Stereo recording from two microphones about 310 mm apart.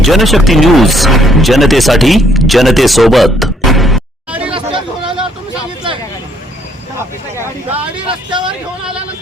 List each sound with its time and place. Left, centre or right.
0.0 s speech: centre
4.5 s chatter: centre
7.8 s vehicle: centre
8.4 s vehicle: centre